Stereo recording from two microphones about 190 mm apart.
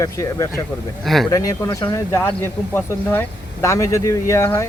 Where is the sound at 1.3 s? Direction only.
20° left (ahead or behind).